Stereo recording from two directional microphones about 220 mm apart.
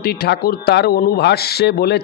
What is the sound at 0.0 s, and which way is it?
Speech, 45° left (ahead or behind).